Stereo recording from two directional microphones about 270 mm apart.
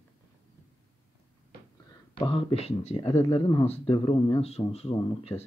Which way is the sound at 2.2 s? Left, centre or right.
Centre.